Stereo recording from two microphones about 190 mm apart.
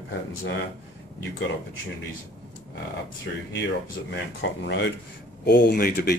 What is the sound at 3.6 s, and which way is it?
Speech, 65° left (ahead or behind).